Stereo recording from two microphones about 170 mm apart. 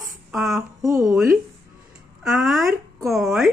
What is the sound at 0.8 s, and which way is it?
Speech, 20° right (ahead or behind).